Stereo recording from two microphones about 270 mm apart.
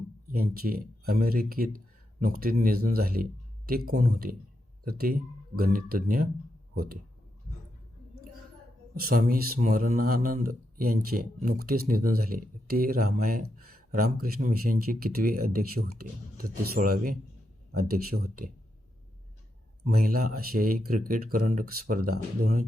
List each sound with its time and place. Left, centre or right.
0.3 s speech: right
9.0 s speech: right
19.8 s speech: right